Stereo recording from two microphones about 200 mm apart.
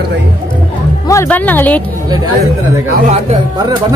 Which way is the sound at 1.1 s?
10° left (ahead or behind).